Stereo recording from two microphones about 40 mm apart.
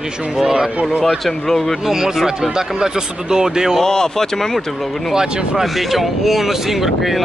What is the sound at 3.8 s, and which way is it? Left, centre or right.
Speech, centre.